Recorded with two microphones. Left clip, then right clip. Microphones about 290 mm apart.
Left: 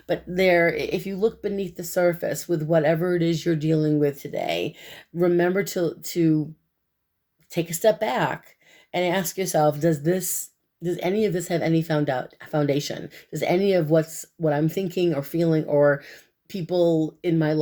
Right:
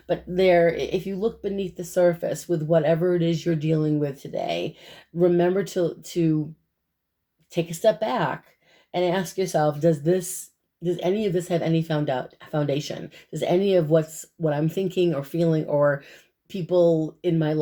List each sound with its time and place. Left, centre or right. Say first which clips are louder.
0.1 s speech: right 1 dB; left
7.5 s speech: even; left